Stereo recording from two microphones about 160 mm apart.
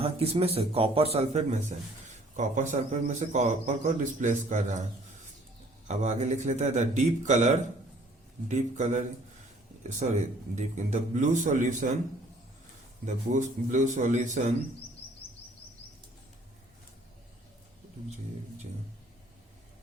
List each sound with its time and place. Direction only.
0.0 s speech: 35° right (ahead or behind)
5.9 s speech: 45° right (ahead or behind)
13.1 s speech: 50° right (ahead or behind)